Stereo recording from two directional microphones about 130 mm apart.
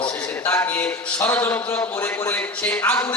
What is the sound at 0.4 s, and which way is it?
A man's voice, 15° left (ahead or behind).